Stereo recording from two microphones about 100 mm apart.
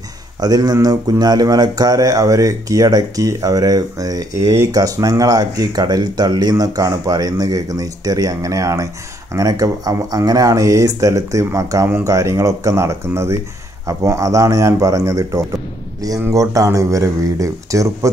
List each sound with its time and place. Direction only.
0.4 s speech: 40° right (ahead or behind)